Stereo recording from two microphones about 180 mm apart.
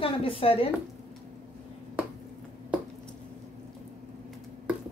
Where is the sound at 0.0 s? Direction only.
30° left (ahead or behind).